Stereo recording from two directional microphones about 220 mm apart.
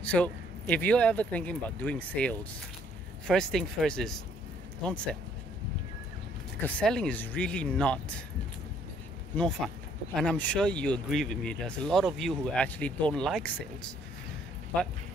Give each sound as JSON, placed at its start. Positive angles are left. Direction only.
{"t": 0.0, "sound": "speech", "side_deg": 5}
{"t": 6.6, "sound": "speech", "side_deg": 5}
{"t": 9.3, "sound": "speech", "side_deg": 5}